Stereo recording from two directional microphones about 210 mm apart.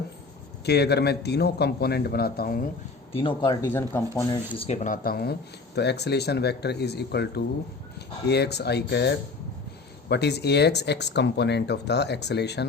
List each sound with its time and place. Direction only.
0.6 s speech: 50° left (ahead or behind)
3.1 s speech: 25° left (ahead or behind); by 12.6 s 55° left (ahead or behind)